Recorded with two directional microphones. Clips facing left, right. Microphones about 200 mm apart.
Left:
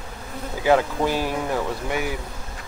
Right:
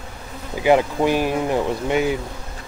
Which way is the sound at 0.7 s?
15° right (ahead or behind).